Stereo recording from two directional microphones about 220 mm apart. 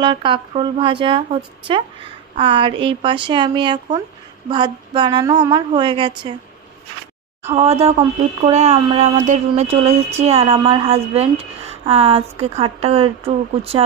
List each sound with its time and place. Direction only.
0.0 s speech: 20° right (ahead or behind)
7.4 s speech: 30° right (ahead or behind)